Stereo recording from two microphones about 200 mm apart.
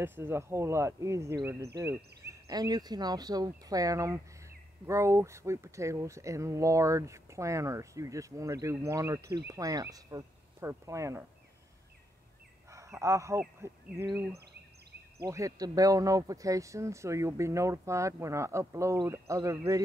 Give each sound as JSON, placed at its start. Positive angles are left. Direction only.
{"t": 0.0, "sound": "speech", "side_deg": -10}
{"t": 12.7, "sound": "speech", "side_deg": -15}
{"t": 15.2, "sound": "speech", "side_deg": -15}